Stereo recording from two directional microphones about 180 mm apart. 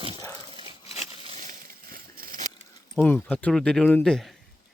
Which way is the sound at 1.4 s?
55° right (ahead or behind).